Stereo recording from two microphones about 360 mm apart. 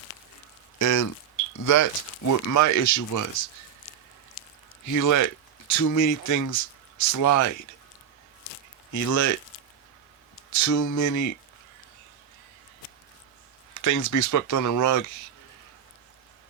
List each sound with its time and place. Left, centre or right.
0.8 s speech: left
4.9 s speech: left
8.9 s speech: left
10.5 s speech: left
13.7 s speech: left